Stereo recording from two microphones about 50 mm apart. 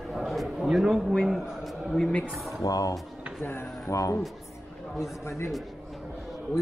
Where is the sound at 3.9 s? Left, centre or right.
Left.